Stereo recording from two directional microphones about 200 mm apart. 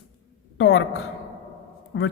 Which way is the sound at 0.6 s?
65° left (ahead or behind).